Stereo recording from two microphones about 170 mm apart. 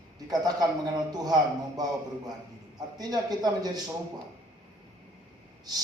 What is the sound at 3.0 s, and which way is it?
Speech, 25° right (ahead or behind).